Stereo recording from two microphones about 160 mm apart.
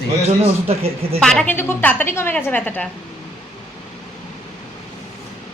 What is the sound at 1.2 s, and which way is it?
A woman's voice, 5° left (ahead or behind).